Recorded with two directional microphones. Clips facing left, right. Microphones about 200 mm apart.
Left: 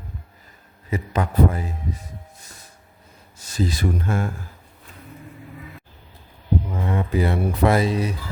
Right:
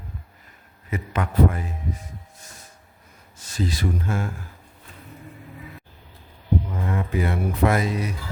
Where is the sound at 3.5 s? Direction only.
40° left (ahead or behind).